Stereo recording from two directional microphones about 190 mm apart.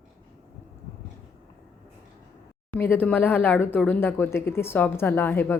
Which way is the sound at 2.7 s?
10° left (ahead or behind).